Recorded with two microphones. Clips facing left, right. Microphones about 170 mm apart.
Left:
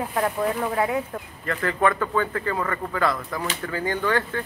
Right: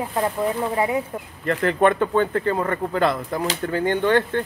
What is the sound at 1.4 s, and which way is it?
Speech, 25° right (ahead or behind).